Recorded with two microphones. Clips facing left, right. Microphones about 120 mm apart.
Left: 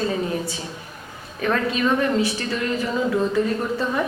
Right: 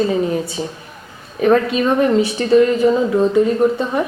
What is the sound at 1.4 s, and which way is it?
A woman's voice, 30° right (ahead or behind).